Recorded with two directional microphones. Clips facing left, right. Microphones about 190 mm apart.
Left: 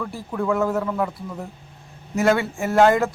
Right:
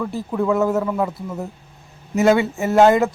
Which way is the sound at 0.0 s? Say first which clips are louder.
Right 4 dB; 15° right (ahead or behind).